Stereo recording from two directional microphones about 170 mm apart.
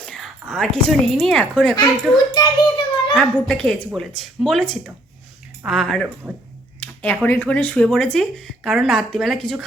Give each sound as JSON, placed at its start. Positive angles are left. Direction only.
{"t": 0.0, "sound": "speech", "side_deg": 5}
{"t": 2.3, "sound": "a child's voice", "side_deg": 30}
{"t": 3.2, "sound": "speech", "side_deg": 5}
{"t": 6.7, "sound": "a sound", "side_deg": 10}
{"t": 7.3, "sound": "speech", "side_deg": 10}